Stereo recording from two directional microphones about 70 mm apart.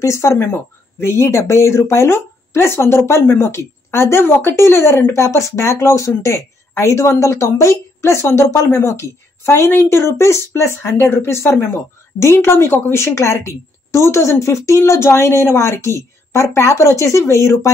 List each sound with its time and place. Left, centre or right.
0.0 s speech: left
0.5 s speech: left